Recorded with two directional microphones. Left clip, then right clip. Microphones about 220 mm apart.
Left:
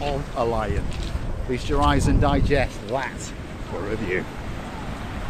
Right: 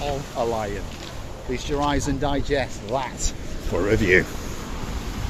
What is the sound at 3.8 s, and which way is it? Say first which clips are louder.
Speech: right 9 dB; 55° right (ahead or behind).